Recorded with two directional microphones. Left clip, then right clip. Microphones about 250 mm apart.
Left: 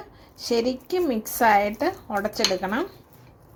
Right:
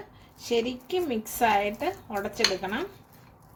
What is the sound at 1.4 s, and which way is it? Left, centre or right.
Speech, left.